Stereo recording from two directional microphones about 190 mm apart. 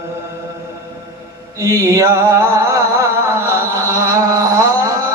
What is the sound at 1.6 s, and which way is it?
Music, 15° right (ahead or behind).